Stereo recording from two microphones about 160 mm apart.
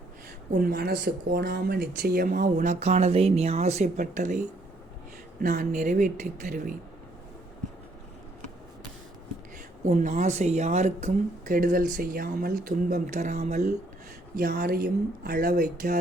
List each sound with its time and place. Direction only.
0.5 s speech: 65° right (ahead or behind)
2.4 s speech: 50° right (ahead or behind)
9.8 s speech: 50° right (ahead or behind)
14.3 s speech: 70° right (ahead or behind)